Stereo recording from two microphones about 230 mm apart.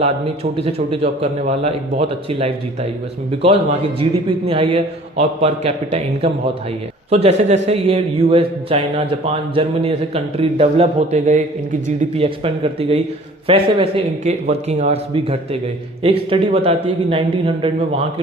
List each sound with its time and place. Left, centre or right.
0.5 s a man's voice: right
4.3 s a man's voice: right